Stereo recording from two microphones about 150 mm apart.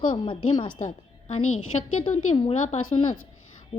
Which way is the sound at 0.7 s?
50° left (ahead or behind).